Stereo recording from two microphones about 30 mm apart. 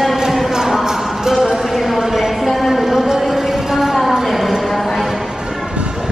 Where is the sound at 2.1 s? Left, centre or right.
Centre.